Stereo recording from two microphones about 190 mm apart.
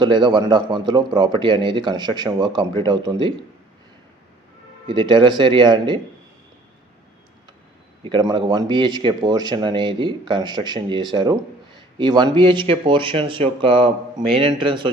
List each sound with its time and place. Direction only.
0.0 s speech: 25° right (ahead or behind)
4.9 s speech: 25° right (ahead or behind)
8.0 s speech: 25° right (ahead or behind)